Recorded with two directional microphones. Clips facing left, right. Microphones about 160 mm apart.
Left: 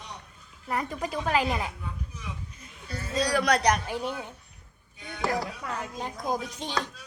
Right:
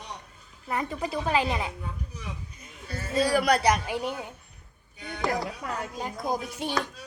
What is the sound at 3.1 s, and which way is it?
A woman's voice, 5° right (ahead or behind).